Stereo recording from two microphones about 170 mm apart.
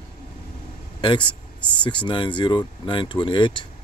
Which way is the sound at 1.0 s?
30° left (ahead or behind).